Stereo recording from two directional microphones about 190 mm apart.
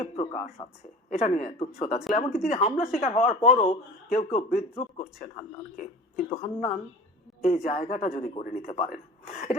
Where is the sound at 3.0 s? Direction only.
30° left (ahead or behind).